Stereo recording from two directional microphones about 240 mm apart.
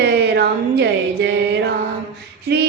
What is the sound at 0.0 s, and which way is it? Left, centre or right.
Music, right.